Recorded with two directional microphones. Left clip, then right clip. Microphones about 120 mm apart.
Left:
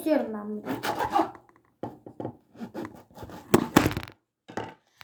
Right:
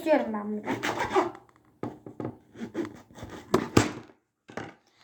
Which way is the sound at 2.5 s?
20° left (ahead or behind).